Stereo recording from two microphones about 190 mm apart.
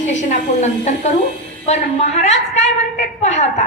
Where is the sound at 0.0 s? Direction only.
40° left (ahead or behind).